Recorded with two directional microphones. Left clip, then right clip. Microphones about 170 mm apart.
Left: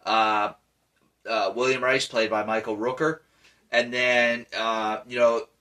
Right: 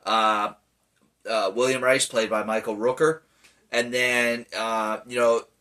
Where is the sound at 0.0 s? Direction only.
30° right (ahead or behind).